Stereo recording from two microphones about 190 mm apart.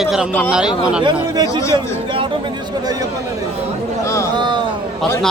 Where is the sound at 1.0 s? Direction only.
25° right (ahead or behind).